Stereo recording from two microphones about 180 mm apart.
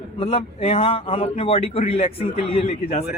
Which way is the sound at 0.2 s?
30° left (ahead or behind).